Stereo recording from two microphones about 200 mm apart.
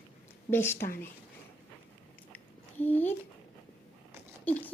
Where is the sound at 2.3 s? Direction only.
10° left (ahead or behind).